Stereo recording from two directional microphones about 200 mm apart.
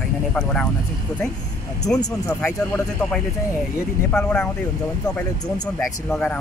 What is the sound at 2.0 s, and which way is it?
Speech, 10° left (ahead or behind).